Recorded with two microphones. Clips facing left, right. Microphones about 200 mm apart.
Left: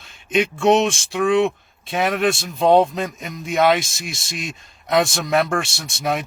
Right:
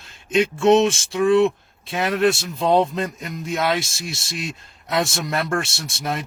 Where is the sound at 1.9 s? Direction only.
55° left (ahead or behind).